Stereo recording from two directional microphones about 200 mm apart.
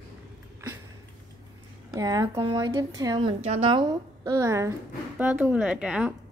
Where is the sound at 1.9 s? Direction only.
20° right (ahead or behind).